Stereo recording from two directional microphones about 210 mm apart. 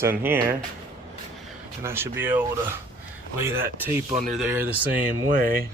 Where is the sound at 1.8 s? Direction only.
10° right (ahead or behind).